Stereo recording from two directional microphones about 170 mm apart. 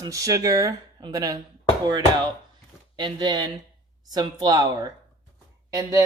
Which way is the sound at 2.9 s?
25° right (ahead or behind).